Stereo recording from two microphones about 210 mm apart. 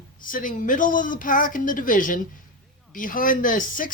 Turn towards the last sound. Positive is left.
turn(degrees=40)  # may be behind; listen again after turning